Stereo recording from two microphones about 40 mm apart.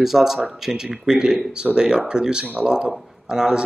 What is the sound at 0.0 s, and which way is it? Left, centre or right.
Speech, centre.